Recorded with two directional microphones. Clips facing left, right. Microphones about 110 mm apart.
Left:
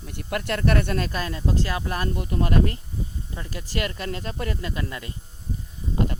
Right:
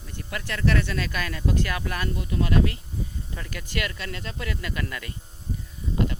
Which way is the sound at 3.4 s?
30° left (ahead or behind).